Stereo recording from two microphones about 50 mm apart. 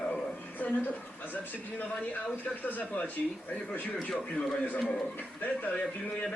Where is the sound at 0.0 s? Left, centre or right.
Centre.